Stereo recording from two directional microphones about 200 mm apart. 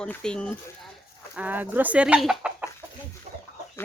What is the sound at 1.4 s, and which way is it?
Speech, 10° right (ahead or behind).